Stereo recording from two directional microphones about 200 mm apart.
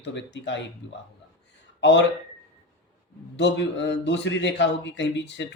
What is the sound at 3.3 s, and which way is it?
Speech, 60° left (ahead or behind).